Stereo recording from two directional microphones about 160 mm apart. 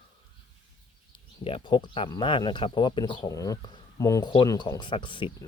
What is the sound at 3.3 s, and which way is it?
Speech, 20° left (ahead or behind).